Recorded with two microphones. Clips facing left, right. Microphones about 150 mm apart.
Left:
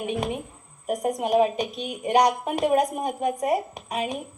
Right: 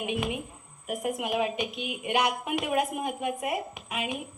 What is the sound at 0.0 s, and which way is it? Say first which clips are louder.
A woman's voice: left 3 dB; 35° left (ahead or behind).